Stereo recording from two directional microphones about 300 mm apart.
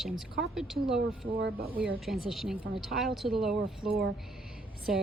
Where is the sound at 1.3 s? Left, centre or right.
Right.